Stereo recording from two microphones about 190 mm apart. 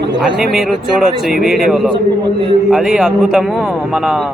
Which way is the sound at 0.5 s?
5° right (ahead or behind).